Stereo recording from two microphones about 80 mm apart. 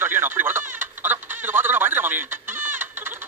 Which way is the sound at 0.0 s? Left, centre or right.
Right.